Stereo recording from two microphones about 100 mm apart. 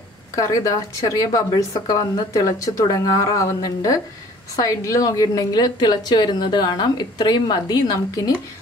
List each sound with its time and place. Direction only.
0.4 s a woman's voice: 35° left (ahead or behind)